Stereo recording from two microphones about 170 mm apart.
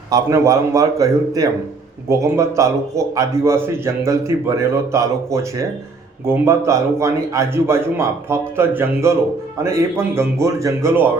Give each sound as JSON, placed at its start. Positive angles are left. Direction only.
{"t": 0.1, "sound": "a man's voice", "side_deg": -20}